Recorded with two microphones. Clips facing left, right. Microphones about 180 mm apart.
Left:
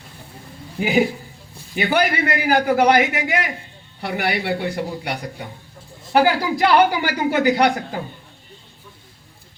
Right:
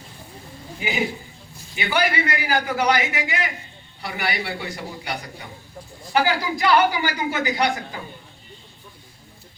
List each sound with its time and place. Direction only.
1.7 s a woman's voice: 55° left (ahead or behind)